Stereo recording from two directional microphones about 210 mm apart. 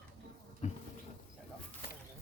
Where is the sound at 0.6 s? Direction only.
35° left (ahead or behind).